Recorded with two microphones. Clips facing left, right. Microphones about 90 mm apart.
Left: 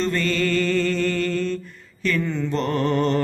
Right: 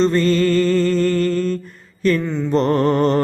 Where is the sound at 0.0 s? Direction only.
35° right (ahead or behind).